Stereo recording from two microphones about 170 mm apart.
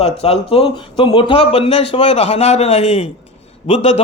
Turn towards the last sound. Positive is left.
turn(degrees=40)  # may be behind; listen again after turning